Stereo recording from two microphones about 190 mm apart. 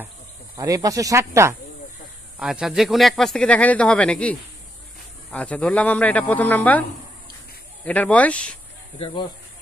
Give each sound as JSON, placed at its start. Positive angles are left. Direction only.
{"t": 0.6, "sound": "speech", "side_deg": -15}
{"t": 7.8, "sound": "speech", "side_deg": 5}
{"t": 8.9, "sound": "speech", "side_deg": 25}